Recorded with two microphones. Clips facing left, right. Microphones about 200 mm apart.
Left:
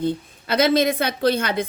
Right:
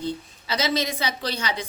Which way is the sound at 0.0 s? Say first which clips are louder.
Left 6 dB; 55° left (ahead or behind).